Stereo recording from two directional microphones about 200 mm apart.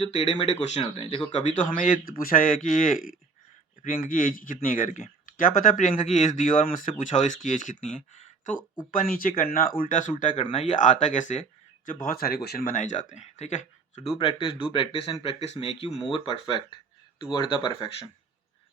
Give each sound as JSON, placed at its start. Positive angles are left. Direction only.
{"t": 0.0, "sound": "speech", "side_deg": 30}
{"t": 8.1, "sound": "a sound", "side_deg": 40}
{"t": 8.9, "sound": "speech", "side_deg": 45}
{"t": 14.2, "sound": "speech", "side_deg": 25}